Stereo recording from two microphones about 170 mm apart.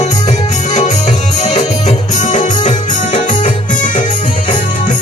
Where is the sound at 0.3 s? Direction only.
40° left (ahead or behind).